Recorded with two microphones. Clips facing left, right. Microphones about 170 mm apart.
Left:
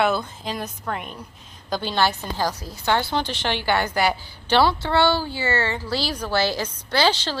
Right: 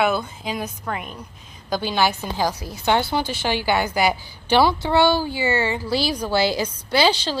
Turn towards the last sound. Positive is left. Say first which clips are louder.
# right 2 dB
turn(degrees=-10)  # may be behind; listen again after turning